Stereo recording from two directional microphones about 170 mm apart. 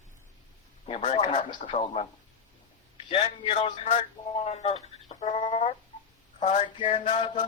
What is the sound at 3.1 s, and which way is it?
Speech, 35° left (ahead or behind).